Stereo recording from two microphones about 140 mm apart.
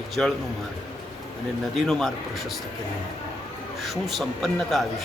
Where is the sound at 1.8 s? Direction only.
Centre (ahead or behind).